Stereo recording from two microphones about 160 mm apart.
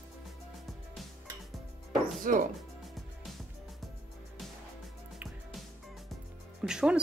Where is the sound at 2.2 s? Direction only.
55° right (ahead or behind).